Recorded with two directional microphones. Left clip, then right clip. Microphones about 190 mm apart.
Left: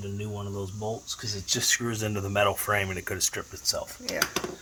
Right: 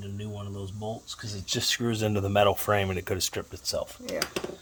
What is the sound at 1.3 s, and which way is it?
Speech, 35° right (ahead or behind).